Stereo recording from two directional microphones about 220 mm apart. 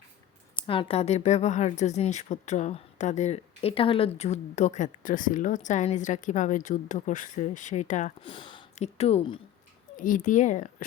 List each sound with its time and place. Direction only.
0.5 s speech: 25° left (ahead or behind)